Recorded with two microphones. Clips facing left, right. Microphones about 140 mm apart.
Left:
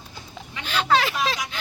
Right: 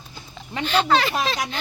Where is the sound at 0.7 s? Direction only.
10° left (ahead or behind).